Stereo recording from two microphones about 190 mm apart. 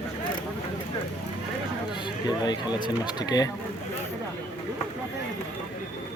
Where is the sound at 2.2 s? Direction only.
20° left (ahead or behind).